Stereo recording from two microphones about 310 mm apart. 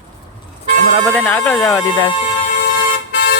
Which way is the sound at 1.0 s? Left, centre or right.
Centre.